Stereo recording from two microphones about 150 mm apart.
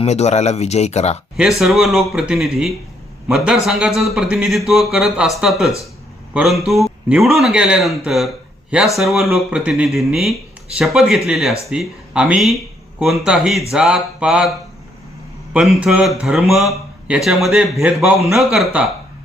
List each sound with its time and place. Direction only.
0.0 s speech: 50° left (ahead or behind)
1.4 s speech: centre (ahead or behind)
15.5 s speech: 5° right (ahead or behind)